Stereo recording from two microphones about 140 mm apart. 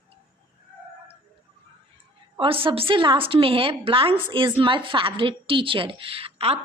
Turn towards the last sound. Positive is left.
turn(degrees=-45)  # may be behind; listen again after turning